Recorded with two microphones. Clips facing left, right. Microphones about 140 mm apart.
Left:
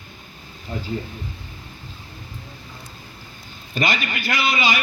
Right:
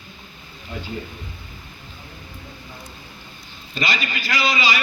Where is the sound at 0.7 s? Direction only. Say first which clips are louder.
Left 3 dB; 35° left (ahead or behind).